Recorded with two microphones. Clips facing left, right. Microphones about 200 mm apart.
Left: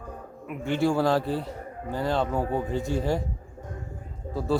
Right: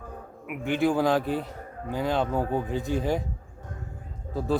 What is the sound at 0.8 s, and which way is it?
Speech, 15° right (ahead or behind).